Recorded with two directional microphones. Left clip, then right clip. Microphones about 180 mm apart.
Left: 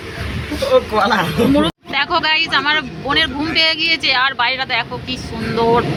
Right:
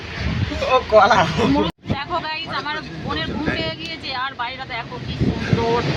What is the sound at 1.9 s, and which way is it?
Speech, 15° left (ahead or behind).